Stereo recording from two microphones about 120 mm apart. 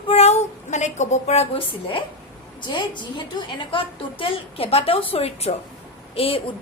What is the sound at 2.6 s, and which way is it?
A woman's voice, 40° left (ahead or behind).